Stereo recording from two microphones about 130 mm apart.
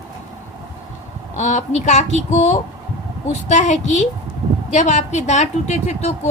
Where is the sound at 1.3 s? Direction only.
65° left (ahead or behind).